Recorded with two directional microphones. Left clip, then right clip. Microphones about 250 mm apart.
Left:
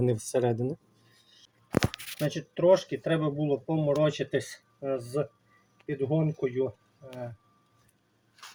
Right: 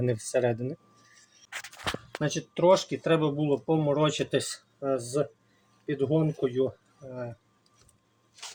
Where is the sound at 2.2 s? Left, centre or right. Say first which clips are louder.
Right 1 dB; centre.